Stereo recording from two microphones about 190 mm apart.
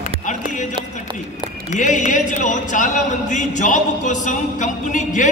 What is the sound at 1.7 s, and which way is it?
Speech, 40° left (ahead or behind).